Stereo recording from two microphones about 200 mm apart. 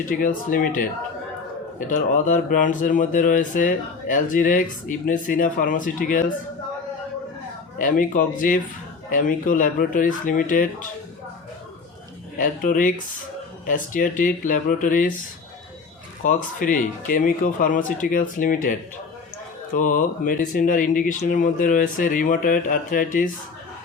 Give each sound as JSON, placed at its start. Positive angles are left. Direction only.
{"t": 0.0, "sound": "speech", "side_deg": 40}
{"t": 1.9, "sound": "speech", "side_deg": 40}
{"t": 7.8, "sound": "speech", "side_deg": 40}
{"t": 12.4, "sound": "speech", "side_deg": 40}
{"t": 16.2, "sound": "speech", "side_deg": 40}
{"t": 19.7, "sound": "speech", "side_deg": 40}